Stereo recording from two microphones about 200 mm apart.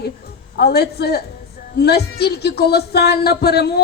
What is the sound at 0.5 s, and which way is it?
A woman's voice, 55° left (ahead or behind).